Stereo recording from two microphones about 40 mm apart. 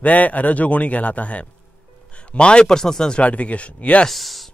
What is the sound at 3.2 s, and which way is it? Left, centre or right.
Speech, left.